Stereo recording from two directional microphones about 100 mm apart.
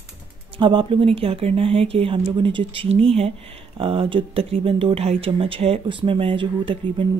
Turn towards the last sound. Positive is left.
turn(degrees=-60)  # may be behind; listen again after turning